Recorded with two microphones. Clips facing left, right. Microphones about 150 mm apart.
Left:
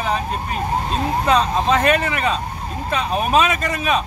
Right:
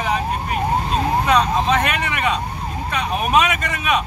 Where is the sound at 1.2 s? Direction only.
30° left (ahead or behind).